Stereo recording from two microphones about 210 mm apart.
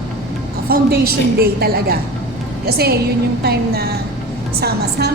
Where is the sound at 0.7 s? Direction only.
45° right (ahead or behind).